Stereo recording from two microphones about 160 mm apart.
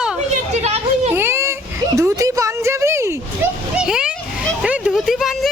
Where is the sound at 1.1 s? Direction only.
15° right (ahead or behind).